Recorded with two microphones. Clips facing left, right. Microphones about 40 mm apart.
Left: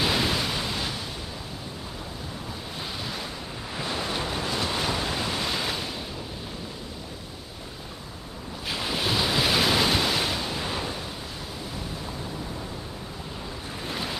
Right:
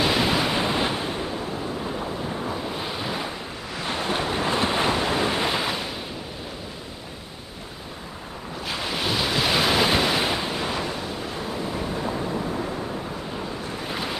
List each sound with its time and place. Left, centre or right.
0.0 s waves: centre; by 1.4 s right
1.9 s wind noise: right
2.7 s waves: centre
4.1 s waves: right
5.6 s waves: centre
8.6 s waves: centre; by 12.7 s right
13.8 s waves: centre